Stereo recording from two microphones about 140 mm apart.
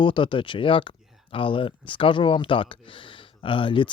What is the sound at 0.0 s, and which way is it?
Speech, 35° left (ahead or behind).